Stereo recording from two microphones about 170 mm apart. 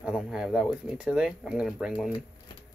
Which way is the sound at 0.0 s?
5° right (ahead or behind).